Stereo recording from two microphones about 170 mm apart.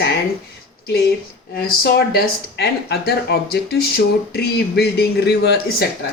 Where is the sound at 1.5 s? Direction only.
70° left (ahead or behind).